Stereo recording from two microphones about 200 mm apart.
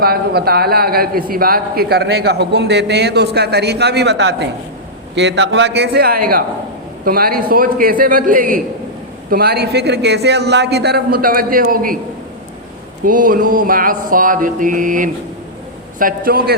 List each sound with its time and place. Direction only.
0.0 s a man's voice: 50° right (ahead or behind)
13.1 s a man's voice: 45° right (ahead or behind)